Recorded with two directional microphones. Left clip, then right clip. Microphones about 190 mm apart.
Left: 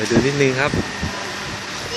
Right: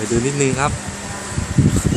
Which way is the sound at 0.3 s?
10° right (ahead or behind).